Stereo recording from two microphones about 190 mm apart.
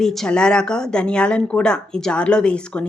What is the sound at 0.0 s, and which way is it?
Speech, centre (ahead or behind).